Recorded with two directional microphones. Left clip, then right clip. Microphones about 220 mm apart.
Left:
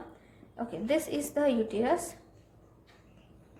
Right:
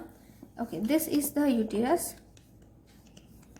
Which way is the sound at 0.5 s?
25° right (ahead or behind).